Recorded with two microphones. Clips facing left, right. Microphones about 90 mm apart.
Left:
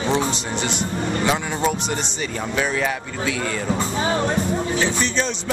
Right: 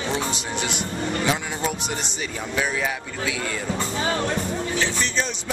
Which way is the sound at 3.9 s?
25° left (ahead or behind).